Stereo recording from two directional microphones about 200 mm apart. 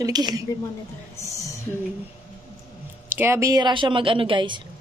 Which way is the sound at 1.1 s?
15° left (ahead or behind).